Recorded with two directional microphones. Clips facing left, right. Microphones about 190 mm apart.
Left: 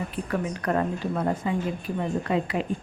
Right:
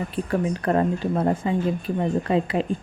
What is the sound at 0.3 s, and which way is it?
Speech, 30° right (ahead or behind).